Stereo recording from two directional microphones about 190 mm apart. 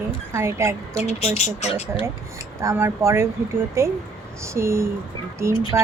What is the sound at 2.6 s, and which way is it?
Speech, 15° right (ahead or behind).